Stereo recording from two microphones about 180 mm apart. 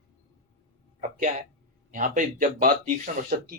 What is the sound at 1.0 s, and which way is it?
Speech, 45° right (ahead or behind).